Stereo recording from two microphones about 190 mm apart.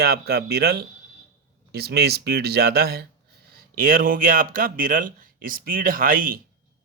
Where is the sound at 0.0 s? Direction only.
55° right (ahead or behind).